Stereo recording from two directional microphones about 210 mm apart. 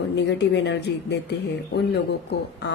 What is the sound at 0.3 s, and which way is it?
Speech, 55° left (ahead or behind).